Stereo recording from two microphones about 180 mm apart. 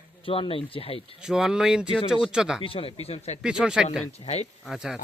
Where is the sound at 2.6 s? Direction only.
30° left (ahead or behind).